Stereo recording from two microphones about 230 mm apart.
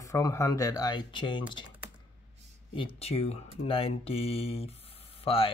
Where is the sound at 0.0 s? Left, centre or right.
Centre.